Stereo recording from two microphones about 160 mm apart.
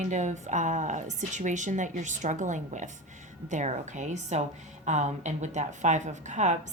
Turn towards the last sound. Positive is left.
turn(degrees=-50)  # may be behind; listen again after turning